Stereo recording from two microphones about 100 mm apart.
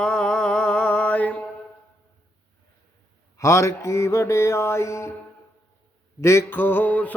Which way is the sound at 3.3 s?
30° left (ahead or behind).